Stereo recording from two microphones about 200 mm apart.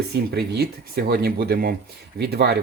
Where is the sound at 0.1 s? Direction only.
55° right (ahead or behind).